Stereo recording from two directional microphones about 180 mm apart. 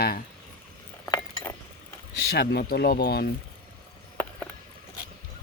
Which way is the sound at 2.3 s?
60° left (ahead or behind).